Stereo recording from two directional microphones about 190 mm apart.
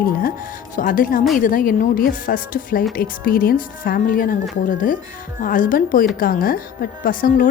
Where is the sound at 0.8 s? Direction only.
45° left (ahead or behind).